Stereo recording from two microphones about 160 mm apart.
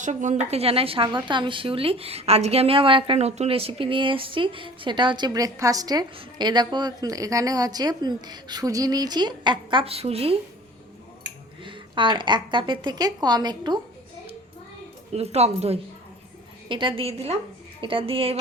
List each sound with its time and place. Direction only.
0.0 s speech: 50° right (ahead or behind)
0.5 s a woman's voice: 35° right (ahead or behind)
11.6 s a woman's voice: 30° right (ahead or behind)
15.1 s a woman's voice: 40° right (ahead or behind)